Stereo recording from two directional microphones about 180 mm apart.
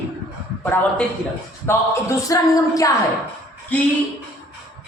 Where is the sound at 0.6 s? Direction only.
10° left (ahead or behind).